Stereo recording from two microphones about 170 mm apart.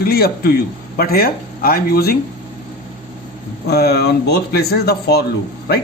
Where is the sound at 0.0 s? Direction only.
65° left (ahead or behind).